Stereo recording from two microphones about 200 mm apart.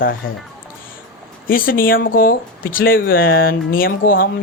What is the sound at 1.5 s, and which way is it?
Speech, 45° left (ahead or behind).